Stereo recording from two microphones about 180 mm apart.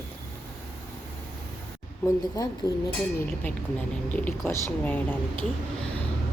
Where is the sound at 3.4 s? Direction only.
10° left (ahead or behind).